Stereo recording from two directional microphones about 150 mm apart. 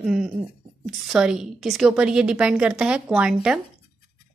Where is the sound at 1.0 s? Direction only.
5° right (ahead or behind).